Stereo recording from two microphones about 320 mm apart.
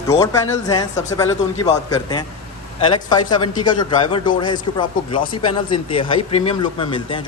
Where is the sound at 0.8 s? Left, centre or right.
Centre.